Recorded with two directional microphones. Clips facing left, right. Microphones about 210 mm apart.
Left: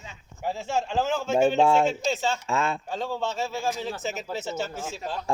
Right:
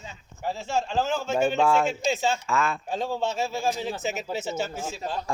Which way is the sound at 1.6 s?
25° left (ahead or behind).